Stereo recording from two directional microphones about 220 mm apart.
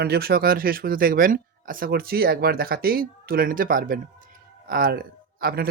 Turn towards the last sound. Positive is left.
turn(degrees=-45)  # may be behind; listen again after turning